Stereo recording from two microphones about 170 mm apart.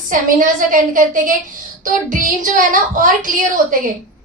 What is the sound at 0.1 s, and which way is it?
A woman's voice, 50° right (ahead or behind).